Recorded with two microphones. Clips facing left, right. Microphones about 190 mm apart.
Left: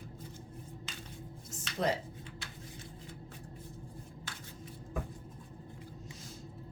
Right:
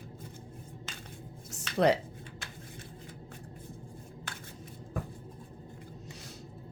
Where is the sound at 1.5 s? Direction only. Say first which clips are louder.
Right 7 dB; 70° right (ahead or behind).